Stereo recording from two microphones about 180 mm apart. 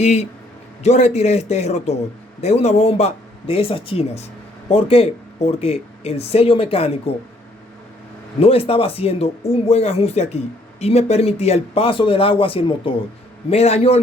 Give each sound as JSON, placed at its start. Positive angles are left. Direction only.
{"t": 0.0, "sound": "speech", "side_deg": 40}
{"t": 8.4, "sound": "speech", "side_deg": 30}